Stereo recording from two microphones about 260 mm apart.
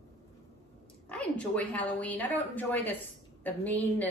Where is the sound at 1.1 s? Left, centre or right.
Centre.